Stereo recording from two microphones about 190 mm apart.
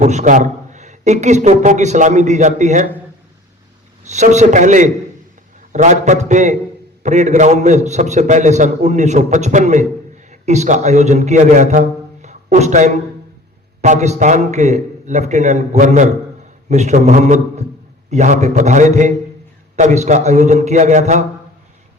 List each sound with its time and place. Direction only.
0.0 s a man's voice: 40° right (ahead or behind)
4.0 s a man's voice: 40° right (ahead or behind)